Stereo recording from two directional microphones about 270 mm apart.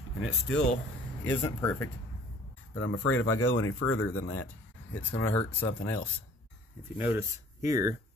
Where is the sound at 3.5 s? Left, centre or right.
Left.